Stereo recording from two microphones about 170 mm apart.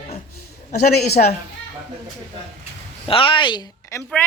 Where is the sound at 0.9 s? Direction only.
65° left (ahead or behind).